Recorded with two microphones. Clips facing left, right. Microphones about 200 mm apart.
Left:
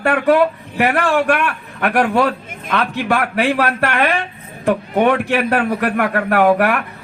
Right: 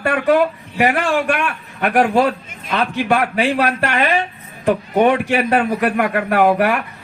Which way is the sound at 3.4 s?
60° left (ahead or behind).